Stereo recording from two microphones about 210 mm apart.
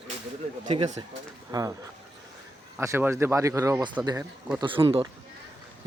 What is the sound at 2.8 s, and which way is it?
Speech, 10° right (ahead or behind).